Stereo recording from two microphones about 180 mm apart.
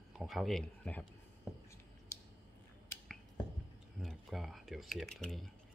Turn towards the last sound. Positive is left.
turn(degrees=0)  # may be behind; listen again after turning